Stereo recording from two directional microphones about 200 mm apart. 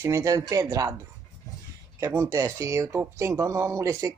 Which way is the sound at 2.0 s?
15° right (ahead or behind).